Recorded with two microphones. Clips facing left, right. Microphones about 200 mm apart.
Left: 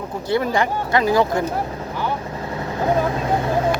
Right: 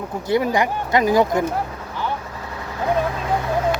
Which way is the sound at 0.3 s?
15° right (ahead or behind).